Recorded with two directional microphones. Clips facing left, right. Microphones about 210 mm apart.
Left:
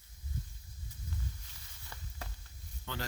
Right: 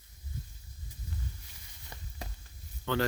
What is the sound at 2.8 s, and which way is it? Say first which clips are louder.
Speech: right 12 dB; 75° right (ahead or behind).